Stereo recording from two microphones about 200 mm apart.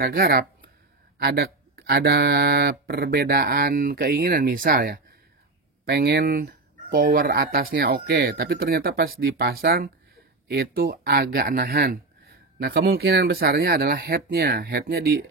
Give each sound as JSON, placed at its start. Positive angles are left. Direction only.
{"t": 0.0, "sound": "speech", "side_deg": -50}